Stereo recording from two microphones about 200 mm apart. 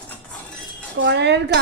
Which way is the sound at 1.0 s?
60° right (ahead or behind).